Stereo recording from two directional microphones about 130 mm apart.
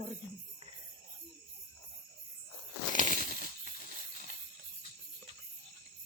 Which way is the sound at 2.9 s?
85° right.